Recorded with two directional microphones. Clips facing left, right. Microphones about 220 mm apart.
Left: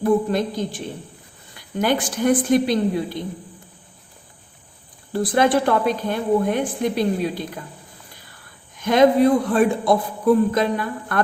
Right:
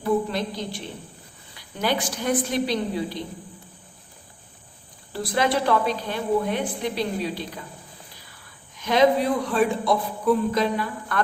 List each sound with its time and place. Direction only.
0.0 s a man's voice: 50° left (ahead or behind)
5.1 s a man's voice: 50° left (ahead or behind)
8.8 s a man's voice: 50° left (ahead or behind)